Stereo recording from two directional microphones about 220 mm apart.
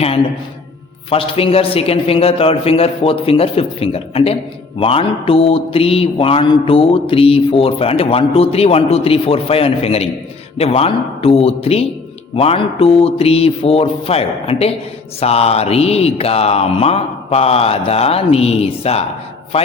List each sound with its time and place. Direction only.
1.1 s a man's voice: 25° left (ahead or behind)